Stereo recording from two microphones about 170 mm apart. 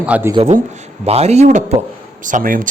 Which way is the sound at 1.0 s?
40° right (ahead or behind).